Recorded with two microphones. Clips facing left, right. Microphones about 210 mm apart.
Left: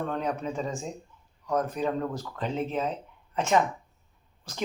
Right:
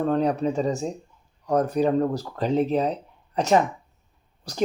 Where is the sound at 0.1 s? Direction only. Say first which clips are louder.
Right 8 dB; 35° right (ahead or behind).